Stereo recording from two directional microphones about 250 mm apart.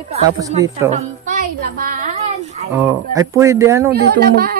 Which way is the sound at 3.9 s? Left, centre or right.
Right.